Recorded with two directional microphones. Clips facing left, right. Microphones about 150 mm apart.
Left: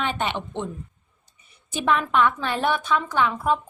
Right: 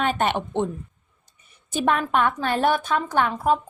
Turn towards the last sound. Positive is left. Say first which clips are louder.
# right 1 dB
turn(degrees=-45)  # may be behind; listen again after turning